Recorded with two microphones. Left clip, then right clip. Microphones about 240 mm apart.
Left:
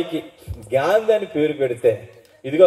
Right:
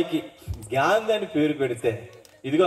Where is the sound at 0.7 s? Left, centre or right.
Right.